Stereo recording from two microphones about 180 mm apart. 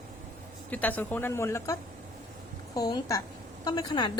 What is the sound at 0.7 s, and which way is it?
A woman's voice, 10° left (ahead or behind).